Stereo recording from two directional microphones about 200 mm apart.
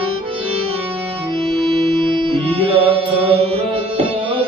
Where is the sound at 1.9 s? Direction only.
25° right (ahead or behind).